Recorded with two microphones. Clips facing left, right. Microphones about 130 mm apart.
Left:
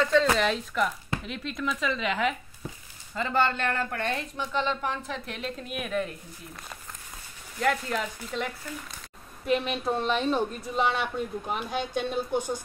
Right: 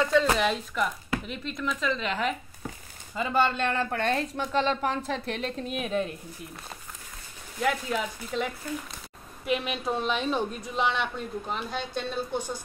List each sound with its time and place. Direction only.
0.0 s speech: 10° right (ahead or behind)
3.2 s speech: 15° right (ahead or behind)
4.0 s a woman's voice: 35° right (ahead or behind)
7.6 s speech: 5° right (ahead or behind)
9.5 s a woman's voice: 5° right (ahead or behind); by 12.6 s 15° left (ahead or behind)